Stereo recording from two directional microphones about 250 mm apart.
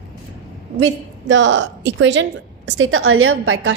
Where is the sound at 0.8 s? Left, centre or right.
Right.